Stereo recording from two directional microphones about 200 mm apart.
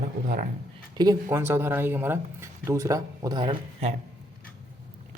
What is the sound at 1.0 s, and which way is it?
Speech, 15° right (ahead or behind).